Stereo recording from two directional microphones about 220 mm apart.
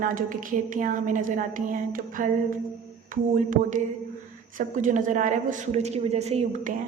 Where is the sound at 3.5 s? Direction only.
35° right (ahead or behind).